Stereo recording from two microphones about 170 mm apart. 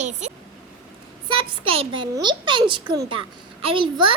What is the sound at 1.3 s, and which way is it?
A child's voice, 30° right (ahead or behind).